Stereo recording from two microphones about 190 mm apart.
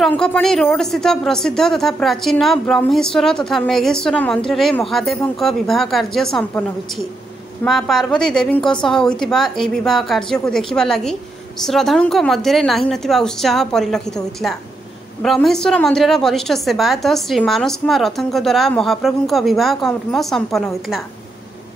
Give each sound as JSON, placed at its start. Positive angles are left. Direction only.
{"t": 0.0, "sound": "speech", "side_deg": 5}